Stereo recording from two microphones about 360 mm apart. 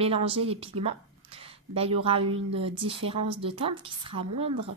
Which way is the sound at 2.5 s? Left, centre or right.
Centre.